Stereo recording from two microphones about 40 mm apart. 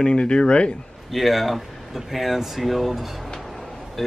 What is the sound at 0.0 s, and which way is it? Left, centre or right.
Speech, left.